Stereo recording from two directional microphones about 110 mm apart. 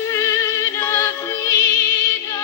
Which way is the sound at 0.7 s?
25° left (ahead or behind).